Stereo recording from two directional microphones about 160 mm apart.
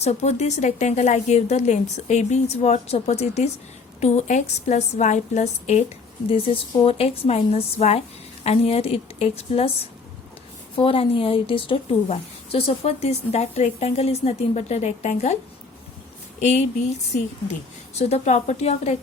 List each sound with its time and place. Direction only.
0.0 s a woman's voice: 45° left (ahead or behind)
10.8 s a woman's voice: 35° left (ahead or behind)
16.4 s speech: 45° left (ahead or behind)
17.9 s speech: 45° left (ahead or behind)